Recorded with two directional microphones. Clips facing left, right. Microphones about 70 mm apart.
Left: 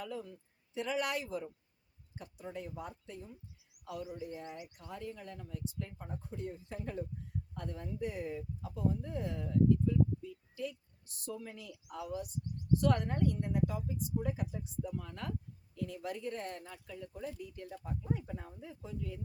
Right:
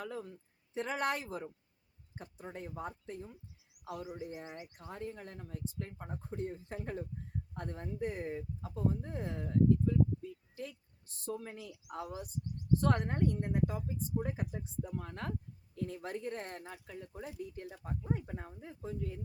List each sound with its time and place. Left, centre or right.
0.0 s speech: right
4.9 s speech: right